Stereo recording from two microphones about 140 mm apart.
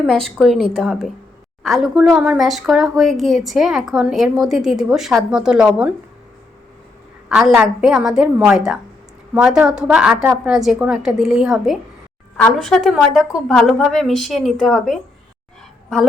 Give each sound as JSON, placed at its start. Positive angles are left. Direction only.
{"t": 0.0, "sound": "a woman's voice", "side_deg": 0}
{"t": 7.3, "sound": "a woman's voice", "side_deg": -5}